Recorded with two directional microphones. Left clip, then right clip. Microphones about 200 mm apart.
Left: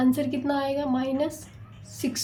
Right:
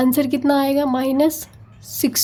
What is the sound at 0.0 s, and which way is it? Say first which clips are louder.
A woman's voice: right 7 dB; 40° right (ahead or behind).